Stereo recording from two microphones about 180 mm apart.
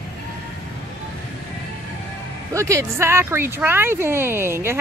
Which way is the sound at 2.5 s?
15° right (ahead or behind).